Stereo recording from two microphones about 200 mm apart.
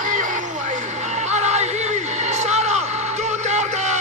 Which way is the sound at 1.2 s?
35° right (ahead or behind).